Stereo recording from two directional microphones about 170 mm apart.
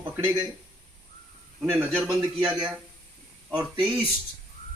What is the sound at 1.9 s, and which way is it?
A man's voice, centre (ahead or behind).